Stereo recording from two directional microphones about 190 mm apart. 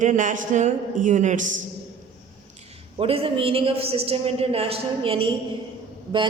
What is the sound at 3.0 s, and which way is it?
Speech, 30° right (ahead or behind).